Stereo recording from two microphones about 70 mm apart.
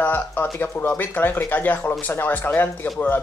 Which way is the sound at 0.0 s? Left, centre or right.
Left.